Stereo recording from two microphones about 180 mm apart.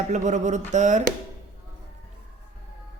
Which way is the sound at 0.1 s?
40° right (ahead or behind).